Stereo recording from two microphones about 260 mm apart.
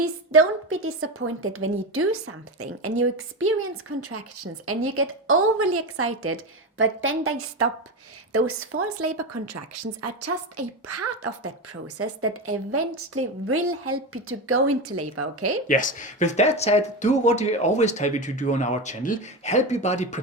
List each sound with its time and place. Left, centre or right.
0.0 s speech: right
15.6 s speech: left